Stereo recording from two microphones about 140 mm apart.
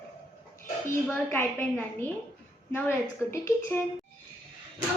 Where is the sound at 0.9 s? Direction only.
15° left (ahead or behind).